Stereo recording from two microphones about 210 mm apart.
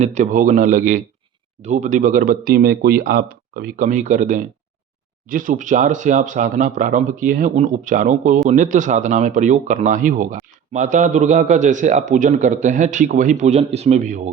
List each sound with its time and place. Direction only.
0.0 s speech: 35° right (ahead or behind)